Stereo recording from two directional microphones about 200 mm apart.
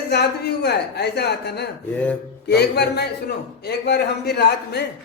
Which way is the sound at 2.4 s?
55° left (ahead or behind).